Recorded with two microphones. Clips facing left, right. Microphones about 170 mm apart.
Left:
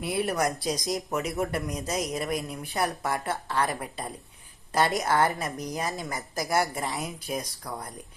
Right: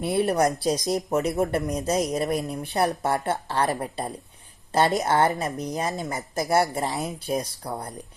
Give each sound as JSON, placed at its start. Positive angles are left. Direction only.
{"t": 0.0, "sound": "speech", "side_deg": -30}